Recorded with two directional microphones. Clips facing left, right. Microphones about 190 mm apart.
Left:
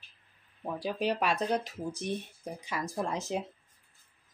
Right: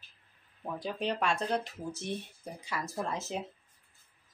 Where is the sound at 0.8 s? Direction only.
5° left (ahead or behind).